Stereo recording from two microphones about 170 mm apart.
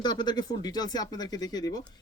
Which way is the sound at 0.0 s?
25° left (ahead or behind).